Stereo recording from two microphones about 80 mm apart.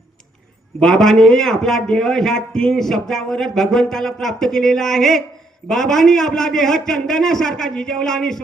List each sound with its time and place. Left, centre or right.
0.8 s a man's voice: centre